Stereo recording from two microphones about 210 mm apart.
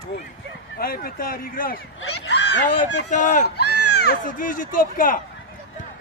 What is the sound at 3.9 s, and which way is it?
Speech, 50° left (ahead or behind).